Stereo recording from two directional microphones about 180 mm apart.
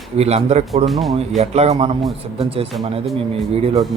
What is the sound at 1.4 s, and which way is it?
Speech, 35° right (ahead or behind).